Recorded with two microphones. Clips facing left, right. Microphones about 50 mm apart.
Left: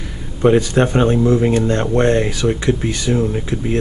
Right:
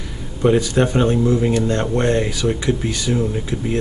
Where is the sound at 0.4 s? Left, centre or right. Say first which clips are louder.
Left 3 dB; left.